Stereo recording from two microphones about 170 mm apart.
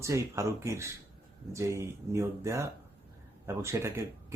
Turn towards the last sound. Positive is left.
turn(degrees=-15)  # may be behind; listen again after turning